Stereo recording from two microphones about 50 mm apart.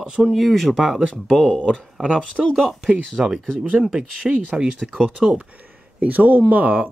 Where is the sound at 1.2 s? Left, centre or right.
Centre.